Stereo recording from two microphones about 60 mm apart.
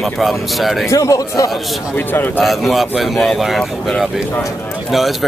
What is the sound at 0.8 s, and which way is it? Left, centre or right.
Speech, left.